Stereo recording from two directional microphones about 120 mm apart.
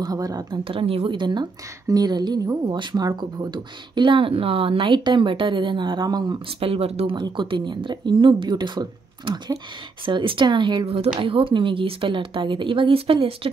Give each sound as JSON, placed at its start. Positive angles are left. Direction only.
{"t": 0.0, "sound": "speech", "side_deg": -30}
{"t": 6.6, "sound": "speech", "side_deg": -55}
{"t": 7.2, "sound": "speech", "side_deg": -40}
{"t": 10.9, "sound": "speech", "side_deg": -50}